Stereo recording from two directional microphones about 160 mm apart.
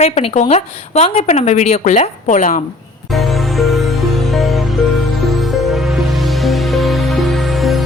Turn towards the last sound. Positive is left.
turn(degrees=0)  # may be behind; listen again after turning